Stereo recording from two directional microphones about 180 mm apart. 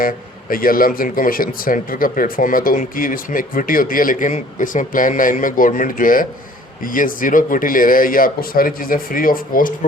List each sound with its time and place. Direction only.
0.5 s speech: 55° left (ahead or behind)